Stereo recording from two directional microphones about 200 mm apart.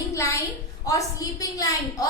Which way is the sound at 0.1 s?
15° left (ahead or behind).